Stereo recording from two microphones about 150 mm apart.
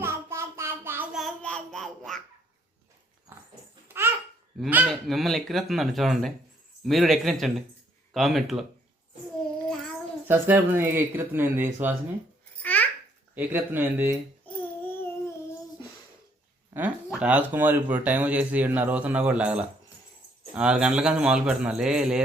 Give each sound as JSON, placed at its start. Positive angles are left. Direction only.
{"t": 0.0, "sound": "child singing", "side_deg": -15}
{"t": 1.1, "sound": "a sound", "side_deg": 5}
{"t": 3.3, "sound": "dog", "side_deg": -15}
{"t": 3.8, "sound": "babbling", "side_deg": -15}
{"t": 4.9, "sound": "speech", "side_deg": 0}
{"t": 9.6, "sound": "child singing", "side_deg": 0}
{"t": 10.2, "sound": "speech", "side_deg": -15}
{"t": 12.6, "sound": "babbling", "side_deg": 10}
{"t": 13.3, "sound": "speech", "side_deg": -10}
{"t": 14.4, "sound": "a sound", "side_deg": 15}
{"t": 16.7, "sound": "speech", "side_deg": -5}